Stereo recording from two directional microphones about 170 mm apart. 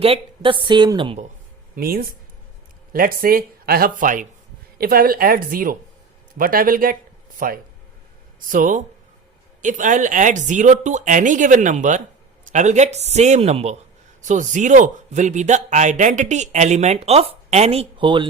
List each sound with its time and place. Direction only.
0.0 s a woman's voice: 30° right (ahead or behind)
1.7 s a man's voice: 60° right (ahead or behind); by 18.3 s 30° right (ahead or behind)